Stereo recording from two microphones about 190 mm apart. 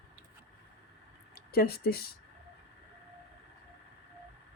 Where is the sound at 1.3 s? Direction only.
55° left (ahead or behind).